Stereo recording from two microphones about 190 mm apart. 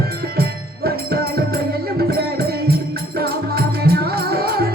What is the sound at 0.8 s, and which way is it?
Music, 55° right (ahead or behind).